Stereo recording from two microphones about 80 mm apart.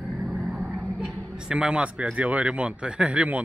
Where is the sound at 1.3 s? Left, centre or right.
Centre.